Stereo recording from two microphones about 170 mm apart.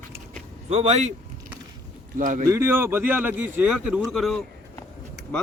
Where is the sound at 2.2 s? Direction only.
50° right (ahead or behind).